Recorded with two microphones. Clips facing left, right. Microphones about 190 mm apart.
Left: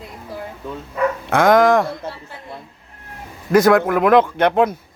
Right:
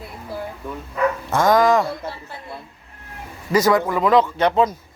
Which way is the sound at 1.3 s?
60° left (ahead or behind).